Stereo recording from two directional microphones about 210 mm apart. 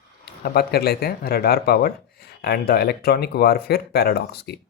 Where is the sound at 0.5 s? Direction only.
50° left (ahead or behind).